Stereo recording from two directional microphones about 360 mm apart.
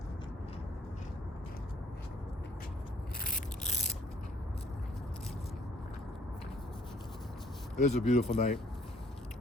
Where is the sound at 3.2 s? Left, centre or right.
Left.